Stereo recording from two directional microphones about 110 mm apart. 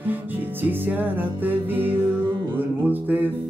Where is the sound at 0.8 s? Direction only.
15° right (ahead or behind).